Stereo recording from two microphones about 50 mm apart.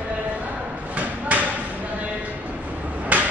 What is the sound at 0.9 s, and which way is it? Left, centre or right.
Thump, right.